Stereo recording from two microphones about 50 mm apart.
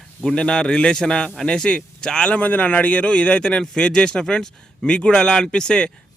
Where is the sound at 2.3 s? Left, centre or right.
Left.